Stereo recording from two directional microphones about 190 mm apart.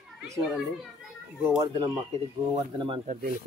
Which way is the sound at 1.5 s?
20° right (ahead or behind).